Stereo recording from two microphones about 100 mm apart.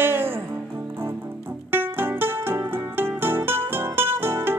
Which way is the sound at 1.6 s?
20° right (ahead or behind).